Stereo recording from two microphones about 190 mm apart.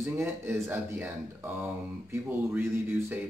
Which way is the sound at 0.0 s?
15° right (ahead or behind).